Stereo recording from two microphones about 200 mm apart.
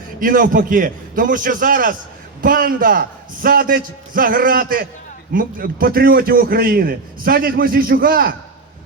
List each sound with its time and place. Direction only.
0.2 s a man's voice: 45° right (ahead or behind)